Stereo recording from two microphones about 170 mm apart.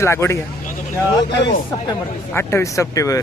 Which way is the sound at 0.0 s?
15° left (ahead or behind).